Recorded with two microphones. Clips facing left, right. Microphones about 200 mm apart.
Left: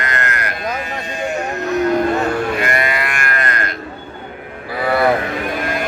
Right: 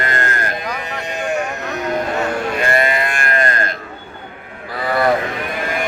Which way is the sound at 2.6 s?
25° right (ahead or behind).